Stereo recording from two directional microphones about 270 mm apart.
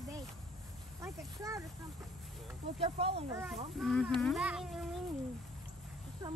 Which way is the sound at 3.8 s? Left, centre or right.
Centre.